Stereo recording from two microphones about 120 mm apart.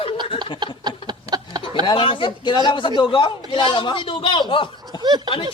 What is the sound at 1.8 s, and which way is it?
Speech, 45° left (ahead or behind).